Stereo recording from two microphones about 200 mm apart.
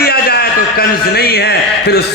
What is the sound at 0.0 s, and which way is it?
A man's voice, 50° left (ahead or behind).